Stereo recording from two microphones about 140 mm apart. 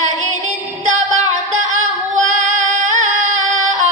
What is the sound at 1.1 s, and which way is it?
Singing, 60° right (ahead or behind).